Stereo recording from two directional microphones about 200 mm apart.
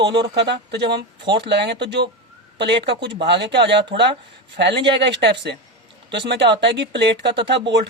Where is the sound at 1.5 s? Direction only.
60° right (ahead or behind).